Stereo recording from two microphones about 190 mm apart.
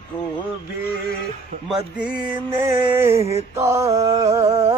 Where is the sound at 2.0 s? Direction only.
5° right (ahead or behind).